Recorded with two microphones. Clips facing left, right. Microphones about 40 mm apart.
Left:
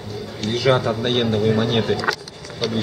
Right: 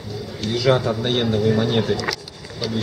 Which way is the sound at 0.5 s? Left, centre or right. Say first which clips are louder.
Even; centre.